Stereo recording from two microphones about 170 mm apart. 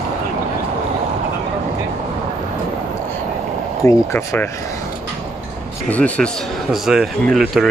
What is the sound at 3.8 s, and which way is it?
Speech, 15° left (ahead or behind).